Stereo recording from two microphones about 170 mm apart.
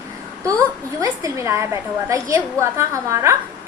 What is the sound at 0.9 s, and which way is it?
A woman's voice, 15° right (ahead or behind).